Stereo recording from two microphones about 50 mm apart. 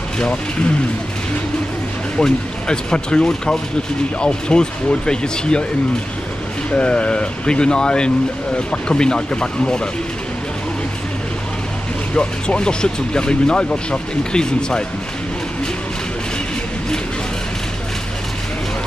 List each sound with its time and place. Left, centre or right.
2.1 s speech: centre
6.7 s speech: left
12.2 s speech: centre